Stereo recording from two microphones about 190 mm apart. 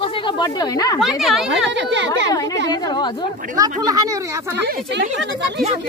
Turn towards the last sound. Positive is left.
turn(degrees=-20)  # may be behind; listen again after turning